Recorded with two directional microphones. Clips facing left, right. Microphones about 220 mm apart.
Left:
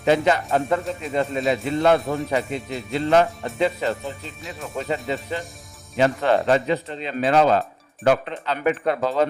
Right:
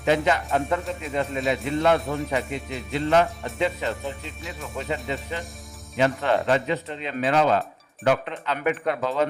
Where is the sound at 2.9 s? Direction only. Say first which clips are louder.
Left 2 dB; 35° left (ahead or behind).